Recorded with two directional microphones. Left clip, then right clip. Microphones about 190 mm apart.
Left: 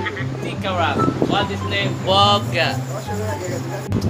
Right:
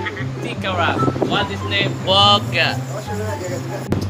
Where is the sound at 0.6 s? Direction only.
15° left (ahead or behind).